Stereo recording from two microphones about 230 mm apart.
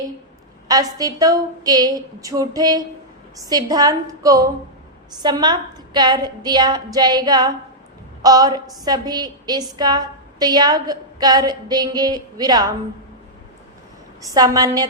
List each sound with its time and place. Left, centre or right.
0.7 s a woman's voice: centre
14.2 s a woman's voice: centre